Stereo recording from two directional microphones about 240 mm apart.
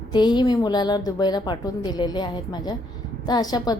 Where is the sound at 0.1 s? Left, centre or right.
Centre.